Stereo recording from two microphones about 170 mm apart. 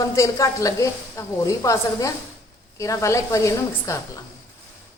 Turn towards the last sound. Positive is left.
turn(degrees=15)  # may be behind; listen again after turning